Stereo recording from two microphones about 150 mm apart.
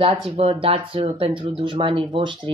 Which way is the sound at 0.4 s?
40° right (ahead or behind).